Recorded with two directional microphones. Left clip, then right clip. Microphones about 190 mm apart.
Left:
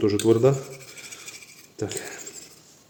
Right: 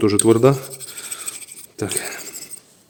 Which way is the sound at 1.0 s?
45° right (ahead or behind).